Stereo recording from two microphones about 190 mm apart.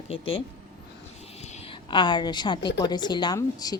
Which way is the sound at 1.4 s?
35° left (ahead or behind).